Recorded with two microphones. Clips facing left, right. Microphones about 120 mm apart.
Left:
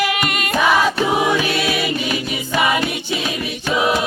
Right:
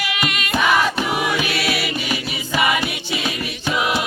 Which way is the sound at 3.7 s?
35° left (ahead or behind).